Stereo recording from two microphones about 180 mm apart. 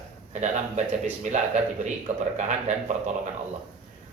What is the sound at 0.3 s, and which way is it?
A man's voice, 40° right (ahead or behind).